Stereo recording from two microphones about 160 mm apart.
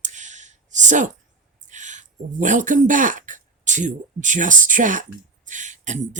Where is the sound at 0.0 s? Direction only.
50° right (ahead or behind).